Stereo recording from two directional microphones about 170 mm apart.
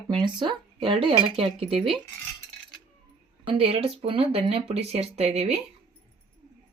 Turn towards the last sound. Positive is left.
turn(degrees=-40)  # may be behind; listen again after turning